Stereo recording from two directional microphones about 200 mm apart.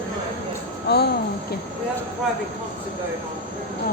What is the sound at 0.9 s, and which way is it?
Speech, 55° left (ahead or behind).